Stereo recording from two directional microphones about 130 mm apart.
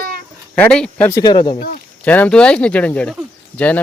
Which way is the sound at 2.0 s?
10° left (ahead or behind).